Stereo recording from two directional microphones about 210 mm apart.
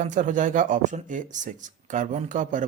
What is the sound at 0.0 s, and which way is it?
Speech, 35° right (ahead or behind).